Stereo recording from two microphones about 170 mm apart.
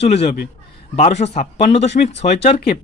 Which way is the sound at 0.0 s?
40° left (ahead or behind).